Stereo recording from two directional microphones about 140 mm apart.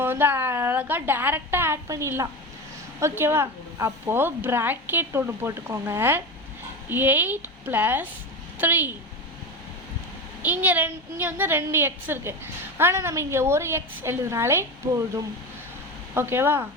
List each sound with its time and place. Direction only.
0.0 s a woman's voice: 15° right (ahead or behind)
10.4 s a woman's voice: 10° right (ahead or behind)